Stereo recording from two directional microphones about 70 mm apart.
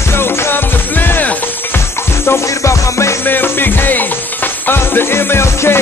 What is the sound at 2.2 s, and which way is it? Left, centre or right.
Music, left.